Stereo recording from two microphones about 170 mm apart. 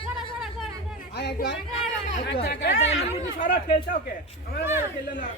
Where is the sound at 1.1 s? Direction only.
85° left.